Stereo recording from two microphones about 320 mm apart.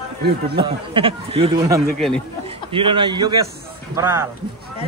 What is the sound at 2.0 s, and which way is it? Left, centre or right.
Speech, centre.